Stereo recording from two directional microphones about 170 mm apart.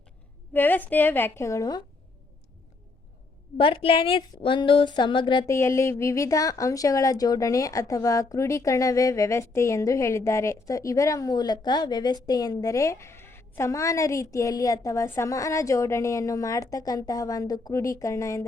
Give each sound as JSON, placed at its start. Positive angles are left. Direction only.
{"t": 0.5, "sound": "a woman's voice", "side_deg": 10}
{"t": 3.6, "sound": "a woman's voice", "side_deg": 35}